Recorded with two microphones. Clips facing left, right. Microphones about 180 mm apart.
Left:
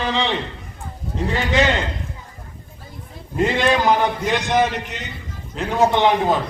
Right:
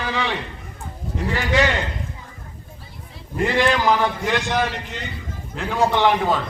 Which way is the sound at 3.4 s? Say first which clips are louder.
Left 1 dB; 20° left (ahead or behind).